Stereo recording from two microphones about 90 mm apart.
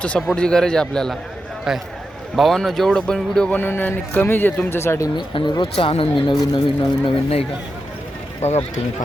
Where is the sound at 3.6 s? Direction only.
20° left (ahead or behind).